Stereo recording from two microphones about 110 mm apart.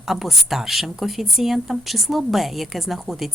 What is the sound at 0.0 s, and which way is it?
A woman's voice, 5° right (ahead or behind).